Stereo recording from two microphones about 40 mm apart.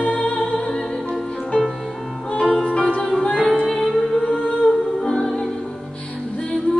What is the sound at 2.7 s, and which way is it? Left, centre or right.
Music, left.